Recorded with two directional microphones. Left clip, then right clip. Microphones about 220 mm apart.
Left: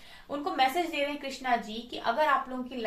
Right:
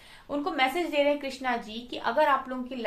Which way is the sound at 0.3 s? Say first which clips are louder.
Right 1 dB; 40° right (ahead or behind).